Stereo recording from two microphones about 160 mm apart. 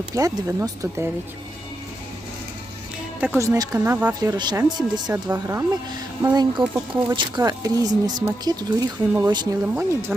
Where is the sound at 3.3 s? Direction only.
20° right (ahead or behind).